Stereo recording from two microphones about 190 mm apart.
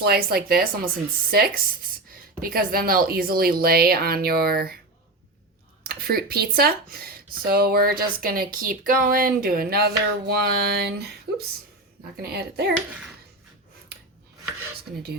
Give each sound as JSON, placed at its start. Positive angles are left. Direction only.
{"t": 0.0, "sound": "speech", "side_deg": -55}
{"t": 5.8, "sound": "a woman's voice", "side_deg": -50}